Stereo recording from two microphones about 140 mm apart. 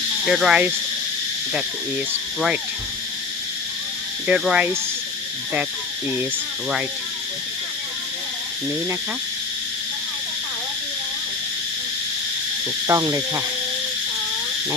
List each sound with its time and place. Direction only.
0.3 s speech: 5° right (ahead or behind)
4.3 s speech: 5° right (ahead or behind)
12.9 s speech: 25° right (ahead or behind)